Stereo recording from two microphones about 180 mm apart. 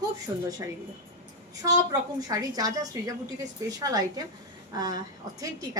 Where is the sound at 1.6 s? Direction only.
20° right (ahead or behind).